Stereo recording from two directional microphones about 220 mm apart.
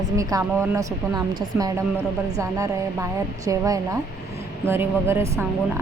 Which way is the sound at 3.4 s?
15° right (ahead or behind).